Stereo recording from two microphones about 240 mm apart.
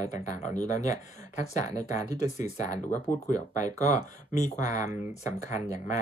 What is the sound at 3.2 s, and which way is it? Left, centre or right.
Speech, left.